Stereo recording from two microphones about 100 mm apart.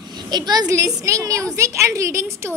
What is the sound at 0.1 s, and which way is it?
A woman's voice, 45° right (ahead or behind).